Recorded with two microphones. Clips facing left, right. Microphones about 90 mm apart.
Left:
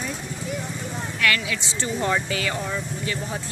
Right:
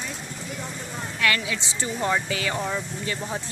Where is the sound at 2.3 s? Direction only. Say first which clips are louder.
Even; 20° right (ahead or behind).